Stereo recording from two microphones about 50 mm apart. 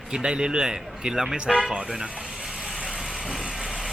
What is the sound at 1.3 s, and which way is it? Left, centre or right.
Speech, right.